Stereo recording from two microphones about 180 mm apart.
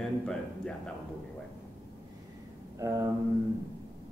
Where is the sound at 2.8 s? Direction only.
15° right (ahead or behind).